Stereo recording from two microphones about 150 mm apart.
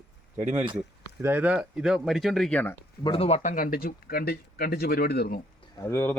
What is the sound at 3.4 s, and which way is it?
Speech, 70° left (ahead or behind).